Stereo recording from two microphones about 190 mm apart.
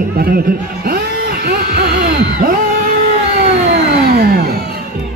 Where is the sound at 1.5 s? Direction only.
50° right (ahead or behind).